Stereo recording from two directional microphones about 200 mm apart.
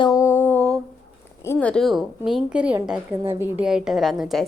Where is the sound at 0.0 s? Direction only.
20° left (ahead or behind).